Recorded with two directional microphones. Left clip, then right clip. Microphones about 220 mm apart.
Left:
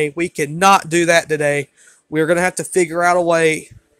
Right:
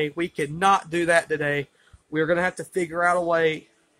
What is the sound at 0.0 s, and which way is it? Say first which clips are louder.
Speech: left 7 dB; 30° left (ahead or behind).